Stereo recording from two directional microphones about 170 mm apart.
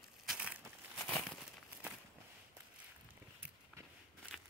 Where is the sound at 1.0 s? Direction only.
5° left (ahead or behind).